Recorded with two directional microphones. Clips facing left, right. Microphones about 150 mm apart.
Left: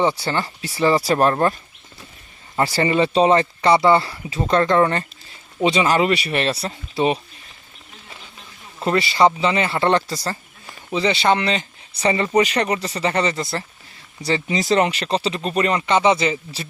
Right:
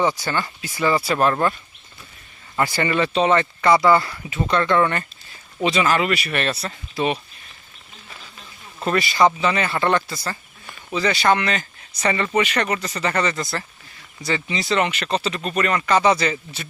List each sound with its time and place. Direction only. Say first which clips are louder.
0.0 s speech: left 1 dB; 25° left (ahead or behind)
2.6 s speech: left 3 dB; 30° left (ahead or behind)
8.8 s speech: left 1 dB; 25° left (ahead or behind)